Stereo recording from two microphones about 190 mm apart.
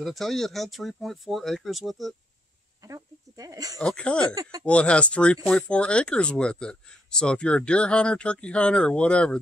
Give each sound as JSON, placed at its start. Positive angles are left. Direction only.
{"t": 0.0, "sound": "speech", "side_deg": 0}
{"t": 2.8, "sound": "speech", "side_deg": -15}
{"t": 3.8, "sound": "speech", "side_deg": 5}
{"t": 4.4, "sound": "speech", "side_deg": -20}
{"t": 4.6, "sound": "speech", "side_deg": 5}